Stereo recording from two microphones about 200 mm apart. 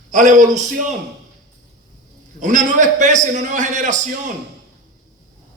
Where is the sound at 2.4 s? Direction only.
40° right (ahead or behind).